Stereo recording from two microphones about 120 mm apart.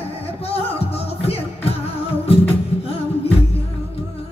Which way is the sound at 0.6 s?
55° left (ahead or behind).